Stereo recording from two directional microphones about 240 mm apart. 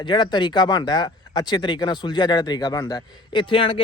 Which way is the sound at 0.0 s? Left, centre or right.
Centre.